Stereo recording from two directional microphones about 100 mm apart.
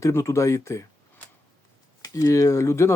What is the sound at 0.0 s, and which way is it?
Speech, 30° left (ahead or behind).